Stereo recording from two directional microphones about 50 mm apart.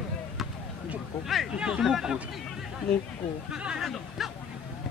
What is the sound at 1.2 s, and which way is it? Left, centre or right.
Speech, centre.